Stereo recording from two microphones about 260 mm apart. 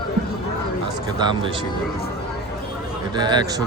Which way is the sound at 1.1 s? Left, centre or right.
Centre.